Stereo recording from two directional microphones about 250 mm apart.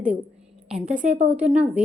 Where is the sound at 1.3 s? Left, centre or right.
Centre.